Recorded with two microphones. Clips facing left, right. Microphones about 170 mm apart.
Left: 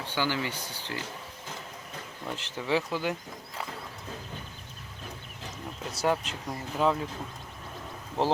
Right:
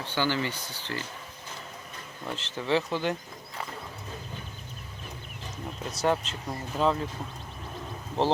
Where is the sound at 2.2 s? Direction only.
10° left (ahead or behind).